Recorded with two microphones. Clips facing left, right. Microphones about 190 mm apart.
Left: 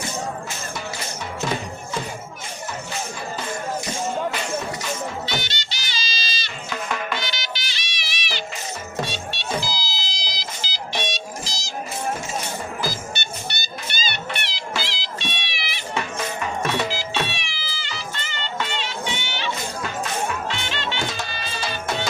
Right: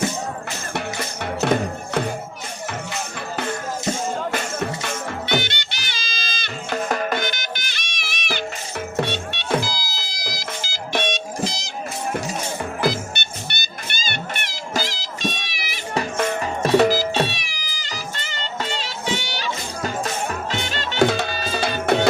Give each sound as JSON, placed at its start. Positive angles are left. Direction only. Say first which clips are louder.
{"t": 0.7, "sound": "music", "louder": "right 8 dB", "side_deg": -65}
{"t": 3.3, "sound": "music", "louder": "right 2 dB", "side_deg": -55}
{"t": 12.8, "sound": "music", "louder": "right 6 dB", "side_deg": -60}
{"t": 21.0, "sound": "music", "louder": "right 16 dB", "side_deg": -60}
{"t": 21.2, "sound": "music", "louder": "right 7 dB", "side_deg": -45}
{"t": 21.6, "sound": "music", "louder": "right 8 dB", "side_deg": -55}